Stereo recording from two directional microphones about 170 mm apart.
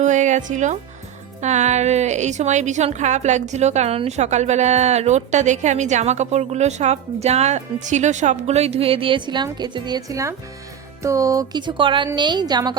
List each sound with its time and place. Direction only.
0.0 s a woman's voice: 45° right (ahead or behind); by 12.7 s 25° right (ahead or behind)